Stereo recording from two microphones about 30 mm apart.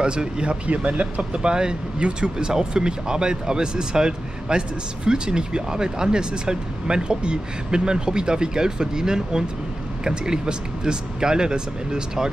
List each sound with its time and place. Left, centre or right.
0.0 s speech: right
0.7 s speech: right
1.3 s speech: right